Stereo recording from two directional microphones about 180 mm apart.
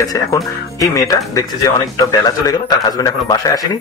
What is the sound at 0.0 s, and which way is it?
Speech, 20° left (ahead or behind).